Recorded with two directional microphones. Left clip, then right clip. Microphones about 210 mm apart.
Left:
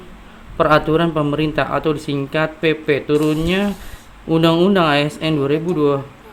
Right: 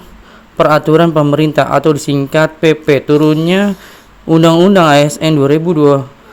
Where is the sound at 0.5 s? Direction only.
40° right (ahead or behind).